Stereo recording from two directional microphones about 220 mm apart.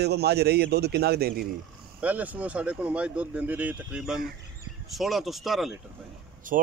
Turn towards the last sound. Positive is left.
turn(degrees=-40)  # may be behind; listen again after turning